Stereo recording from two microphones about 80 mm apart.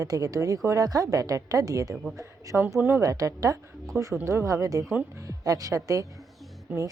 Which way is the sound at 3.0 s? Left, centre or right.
Right.